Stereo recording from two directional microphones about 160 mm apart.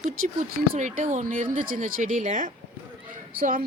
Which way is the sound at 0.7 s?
50° right (ahead or behind).